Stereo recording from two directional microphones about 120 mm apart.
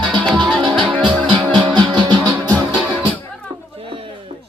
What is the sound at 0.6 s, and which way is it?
Music, 40° right (ahead or behind).